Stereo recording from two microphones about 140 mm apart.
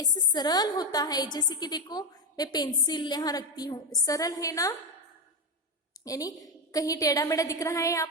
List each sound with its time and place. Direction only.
0.0 s a woman's voice: 30° left (ahead or behind)
6.1 s a woman's voice: 25° left (ahead or behind)